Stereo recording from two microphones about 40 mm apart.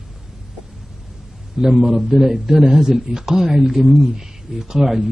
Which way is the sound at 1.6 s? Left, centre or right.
Centre.